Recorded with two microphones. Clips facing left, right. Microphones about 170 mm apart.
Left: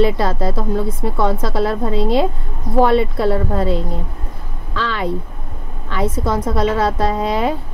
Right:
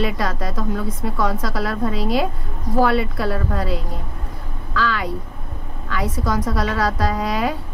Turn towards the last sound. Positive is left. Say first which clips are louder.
# left 3 dB
turn(degrees=25)  # may be behind; listen again after turning